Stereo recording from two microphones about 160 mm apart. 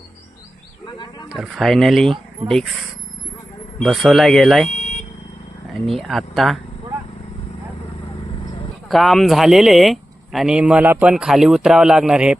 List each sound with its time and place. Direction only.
0.9 s speech: 30° left (ahead or behind)
1.3 s speech: centre (ahead or behind)
3.8 s speech: centre (ahead or behind)
4.7 s vehicle: 45° left (ahead or behind)
5.8 s speech: centre (ahead or behind)
8.9 s speech: centre (ahead or behind)